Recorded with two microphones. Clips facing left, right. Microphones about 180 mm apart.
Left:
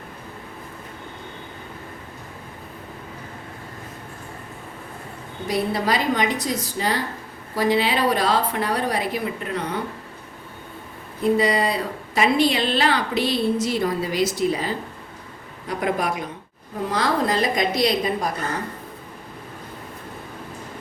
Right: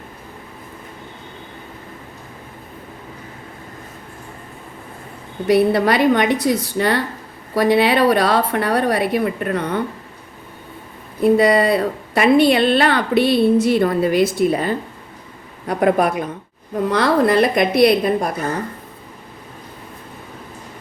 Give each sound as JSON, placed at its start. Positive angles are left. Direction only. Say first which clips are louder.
{"t": 5.5, "sound": "a woman's voice", "louder": "right 8 dB", "side_deg": -65}
{"t": 11.2, "sound": "a woman's voice", "louder": "right 6 dB", "side_deg": -60}